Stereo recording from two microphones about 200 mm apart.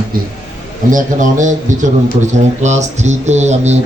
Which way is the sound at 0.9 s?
40° right (ahead or behind).